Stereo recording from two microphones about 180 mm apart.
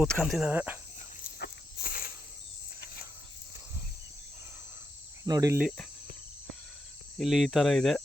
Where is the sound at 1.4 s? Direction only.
50° left (ahead or behind).